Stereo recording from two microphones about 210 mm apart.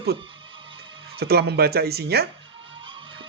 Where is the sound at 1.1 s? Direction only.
50° right (ahead or behind).